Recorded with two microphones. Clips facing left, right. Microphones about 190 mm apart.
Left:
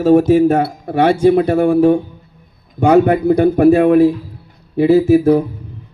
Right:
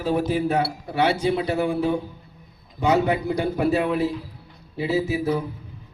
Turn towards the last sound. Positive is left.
turn(degrees=50)  # may be behind; listen again after turning